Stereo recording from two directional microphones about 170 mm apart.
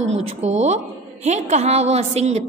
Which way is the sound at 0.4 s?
40° right (ahead or behind).